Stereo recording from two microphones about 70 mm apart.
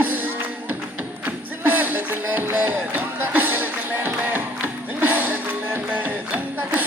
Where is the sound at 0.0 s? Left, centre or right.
Right.